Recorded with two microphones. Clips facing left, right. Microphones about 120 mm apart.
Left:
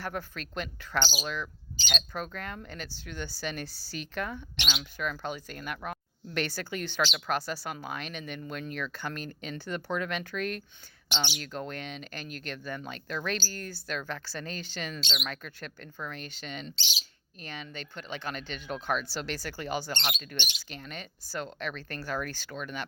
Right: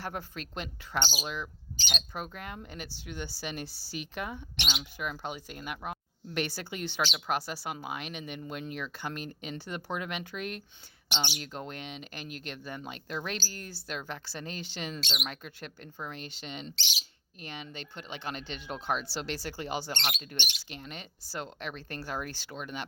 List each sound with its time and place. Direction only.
0.0 s speech: 20° right (ahead or behind)